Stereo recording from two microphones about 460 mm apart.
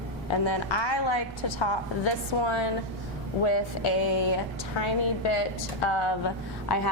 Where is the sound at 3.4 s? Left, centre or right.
Left.